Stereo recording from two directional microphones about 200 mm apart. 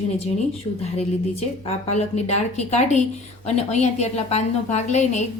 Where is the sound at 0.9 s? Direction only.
30° left (ahead or behind).